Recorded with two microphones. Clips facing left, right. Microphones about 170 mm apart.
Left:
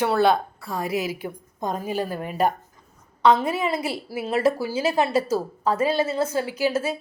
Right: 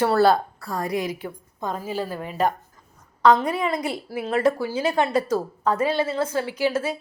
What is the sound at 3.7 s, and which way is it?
A woman's voice, 5° left (ahead or behind).